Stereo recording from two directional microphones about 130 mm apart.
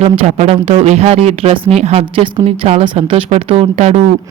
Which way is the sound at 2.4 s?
55° right (ahead or behind).